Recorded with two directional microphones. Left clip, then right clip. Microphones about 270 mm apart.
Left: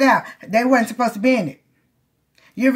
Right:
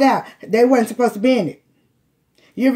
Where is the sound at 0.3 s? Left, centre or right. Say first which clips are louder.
Right 2 dB; left.